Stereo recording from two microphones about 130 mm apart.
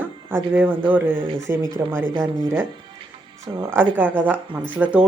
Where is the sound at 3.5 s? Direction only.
15° right (ahead or behind).